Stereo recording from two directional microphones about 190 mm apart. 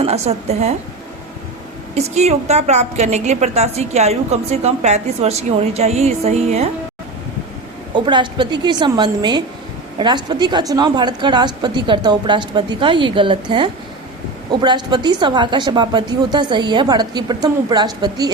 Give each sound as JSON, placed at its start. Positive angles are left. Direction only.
{"t": 0.0, "sound": "a woman's voice", "side_deg": -35}
{"t": 2.0, "sound": "a woman's voice", "side_deg": -35}
{"t": 7.9, "sound": "a woman's voice", "side_deg": -25}